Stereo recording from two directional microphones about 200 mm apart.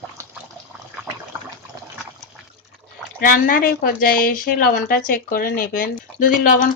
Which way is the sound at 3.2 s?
45° left (ahead or behind).